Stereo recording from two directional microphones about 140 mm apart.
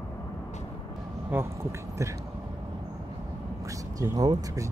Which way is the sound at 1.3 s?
15° right (ahead or behind).